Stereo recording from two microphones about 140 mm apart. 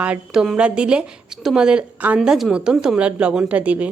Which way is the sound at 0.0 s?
5° right (ahead or behind).